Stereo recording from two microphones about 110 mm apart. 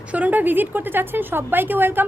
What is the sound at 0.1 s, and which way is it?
A woman's voice, 15° right (ahead or behind).